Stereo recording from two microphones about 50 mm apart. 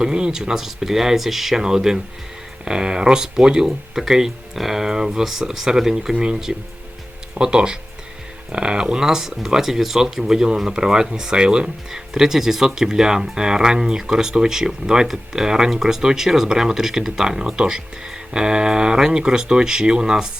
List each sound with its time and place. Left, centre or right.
0.0 s speech: centre